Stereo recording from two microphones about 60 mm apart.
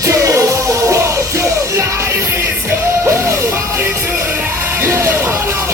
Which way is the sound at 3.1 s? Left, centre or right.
Right.